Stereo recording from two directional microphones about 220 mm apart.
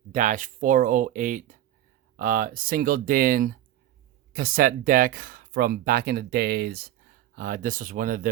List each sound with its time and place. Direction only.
0.1 s speech: 35° right (ahead or behind)